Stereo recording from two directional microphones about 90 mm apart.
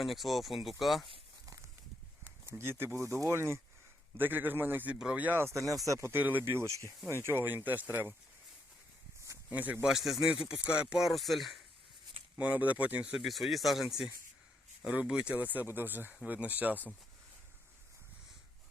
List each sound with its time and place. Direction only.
0.0 s speech: centre (ahead or behind)
2.2 s speech: 25° right (ahead or behind)
9.5 s speech: 20° right (ahead or behind)
9.8 s speech: 5° right (ahead or behind)
12.4 s speech: 15° right (ahead or behind)
13.1 s speech: centre (ahead or behind); by 16.9 s 20° right (ahead or behind)